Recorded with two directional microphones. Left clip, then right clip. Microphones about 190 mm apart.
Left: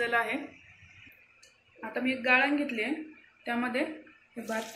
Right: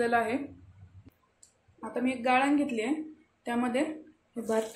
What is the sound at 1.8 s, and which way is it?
A woman's voice, 40° right (ahead or behind).